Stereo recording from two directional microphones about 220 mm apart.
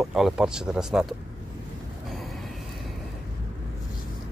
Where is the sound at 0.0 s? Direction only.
Centre (ahead or behind).